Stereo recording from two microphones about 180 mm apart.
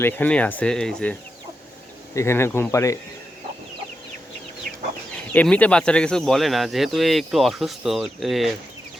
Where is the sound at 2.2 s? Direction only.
15° left (ahead or behind).